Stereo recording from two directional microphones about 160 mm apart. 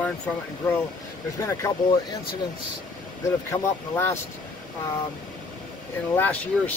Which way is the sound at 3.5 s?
35° left (ahead or behind).